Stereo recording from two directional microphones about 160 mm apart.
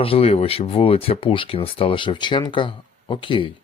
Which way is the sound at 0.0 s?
35° left (ahead or behind).